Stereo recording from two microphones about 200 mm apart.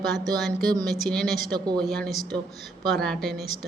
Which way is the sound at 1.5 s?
20° right (ahead or behind).